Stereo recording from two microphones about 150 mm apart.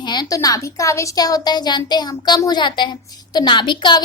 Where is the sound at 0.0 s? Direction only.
30° left (ahead or behind).